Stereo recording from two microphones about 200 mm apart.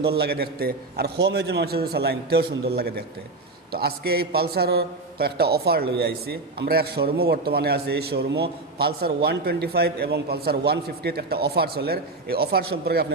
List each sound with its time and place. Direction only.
0.0 s a man's voice: 55° right (ahead or behind)